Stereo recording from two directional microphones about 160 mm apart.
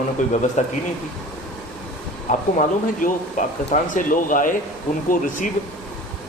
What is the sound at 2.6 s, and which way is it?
Speech, 50° left (ahead or behind).